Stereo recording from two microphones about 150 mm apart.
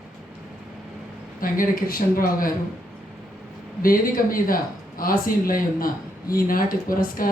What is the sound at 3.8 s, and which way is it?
Speech, 70° left (ahead or behind).